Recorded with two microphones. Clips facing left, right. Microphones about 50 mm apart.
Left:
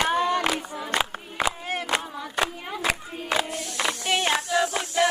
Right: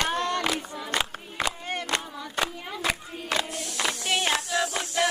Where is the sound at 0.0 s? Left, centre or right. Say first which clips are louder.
Left 4 dB; centre.